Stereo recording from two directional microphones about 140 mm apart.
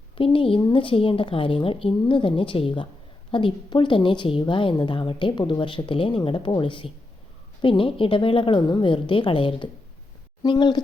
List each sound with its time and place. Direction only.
0.2 s a woman's voice: 40° left (ahead or behind)